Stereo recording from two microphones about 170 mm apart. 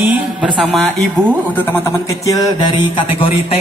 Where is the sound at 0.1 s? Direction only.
5° right (ahead or behind).